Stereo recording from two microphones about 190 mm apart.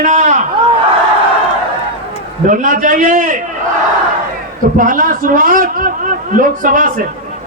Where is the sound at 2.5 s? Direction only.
45° right (ahead or behind).